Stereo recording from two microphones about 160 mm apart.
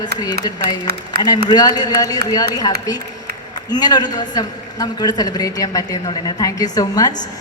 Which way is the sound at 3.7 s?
25° left (ahead or behind).